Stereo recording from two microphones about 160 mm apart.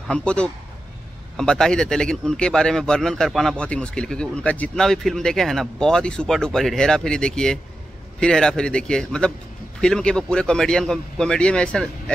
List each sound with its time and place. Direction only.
0.1 s a man's voice: 5° left (ahead or behind)